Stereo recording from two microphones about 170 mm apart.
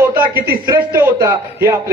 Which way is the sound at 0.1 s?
60° right (ahead or behind).